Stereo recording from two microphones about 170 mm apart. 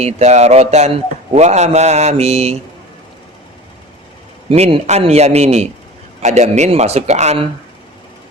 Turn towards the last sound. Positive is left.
turn(degrees=-40)  # may be behind; listen again after turning